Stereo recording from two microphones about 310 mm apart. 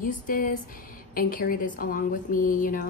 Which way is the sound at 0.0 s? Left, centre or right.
Left.